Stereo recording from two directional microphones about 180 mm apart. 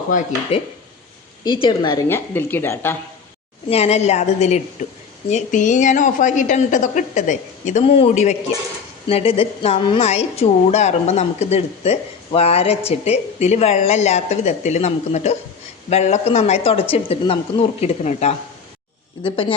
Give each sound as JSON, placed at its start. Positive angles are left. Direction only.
{"t": 1.5, "sound": "a woman's voice", "side_deg": 25}
{"t": 2.0, "sound": "speech", "side_deg": 15}
{"t": 3.7, "sound": "a woman's voice", "side_deg": 35}